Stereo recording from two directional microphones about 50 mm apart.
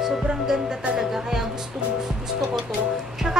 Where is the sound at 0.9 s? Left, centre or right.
Centre.